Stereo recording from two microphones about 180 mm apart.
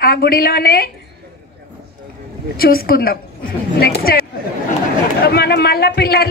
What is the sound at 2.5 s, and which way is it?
A woman's voice, 55° left (ahead or behind).